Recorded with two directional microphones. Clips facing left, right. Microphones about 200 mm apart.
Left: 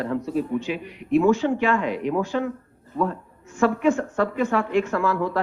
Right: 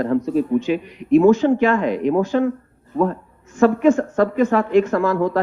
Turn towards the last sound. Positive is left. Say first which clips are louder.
# right 5 dB
turn(degrees=-40)  # may be behind; listen again after turning